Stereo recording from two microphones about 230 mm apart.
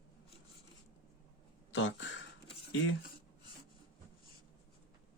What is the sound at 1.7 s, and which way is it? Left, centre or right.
Speech, left.